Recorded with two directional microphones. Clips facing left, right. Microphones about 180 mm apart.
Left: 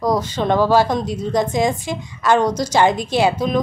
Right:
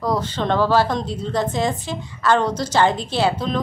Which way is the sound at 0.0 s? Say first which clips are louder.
Left 3 dB; 15° left (ahead or behind).